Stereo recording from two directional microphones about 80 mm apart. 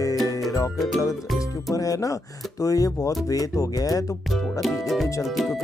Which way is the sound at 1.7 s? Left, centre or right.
Left.